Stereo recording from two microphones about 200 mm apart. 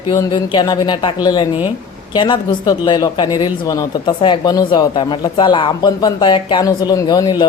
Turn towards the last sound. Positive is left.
turn(degrees=20)  # may be behind; listen again after turning